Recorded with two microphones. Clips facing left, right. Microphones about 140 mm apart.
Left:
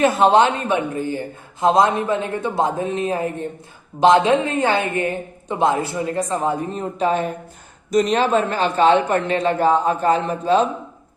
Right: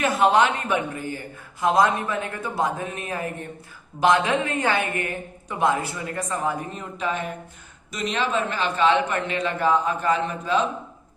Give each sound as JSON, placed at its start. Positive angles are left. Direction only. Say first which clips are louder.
{"t": 0.0, "sound": "a woman's voice", "louder": "left 5 dB", "side_deg": 30}